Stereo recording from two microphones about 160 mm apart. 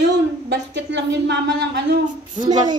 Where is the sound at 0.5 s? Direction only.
90° right.